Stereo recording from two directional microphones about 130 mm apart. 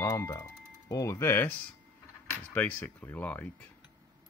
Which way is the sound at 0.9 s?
25° left (ahead or behind).